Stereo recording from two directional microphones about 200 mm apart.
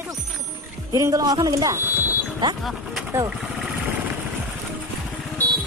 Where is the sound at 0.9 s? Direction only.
15° right (ahead or behind).